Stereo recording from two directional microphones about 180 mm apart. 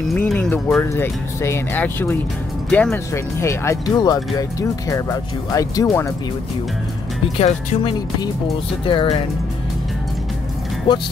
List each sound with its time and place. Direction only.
0.1 s speech: 5° left (ahead or behind)
7.3 s speech: 35° left (ahead or behind)